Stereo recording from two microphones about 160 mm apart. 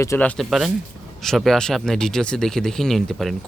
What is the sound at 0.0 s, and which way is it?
Speech, 20° left (ahead or behind).